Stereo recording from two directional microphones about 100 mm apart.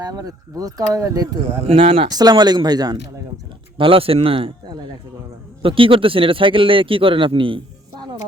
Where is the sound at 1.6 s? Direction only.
65° right (ahead or behind).